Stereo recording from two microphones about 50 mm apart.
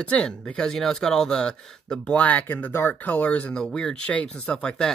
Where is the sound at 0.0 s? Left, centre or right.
Left.